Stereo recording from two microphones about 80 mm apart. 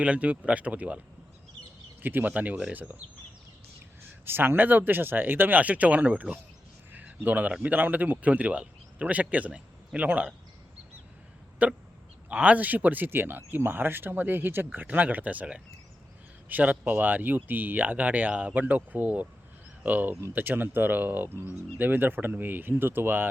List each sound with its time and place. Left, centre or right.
0.0 s speech: centre
4.3 s speech: right
11.6 s speech: centre